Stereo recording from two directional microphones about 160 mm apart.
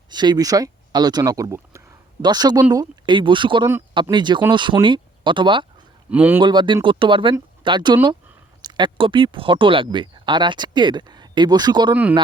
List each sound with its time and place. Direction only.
0.1 s speech: 25° right (ahead or behind)
6.1 s speech: 10° right (ahead or behind)
6.4 s speech: 30° right (ahead or behind)